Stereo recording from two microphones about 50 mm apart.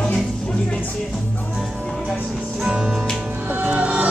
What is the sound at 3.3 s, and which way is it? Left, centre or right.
Music, right.